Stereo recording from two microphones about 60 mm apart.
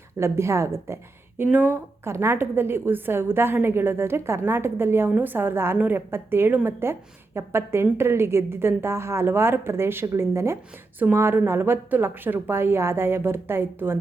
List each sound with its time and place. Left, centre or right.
0.2 s a woman's voice: right
1.5 s a woman's voice: right